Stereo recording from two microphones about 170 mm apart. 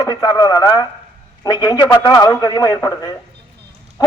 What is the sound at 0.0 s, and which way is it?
A man's voice, 20° left (ahead or behind).